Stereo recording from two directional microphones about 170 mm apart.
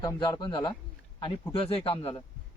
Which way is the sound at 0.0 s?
25° left (ahead or behind).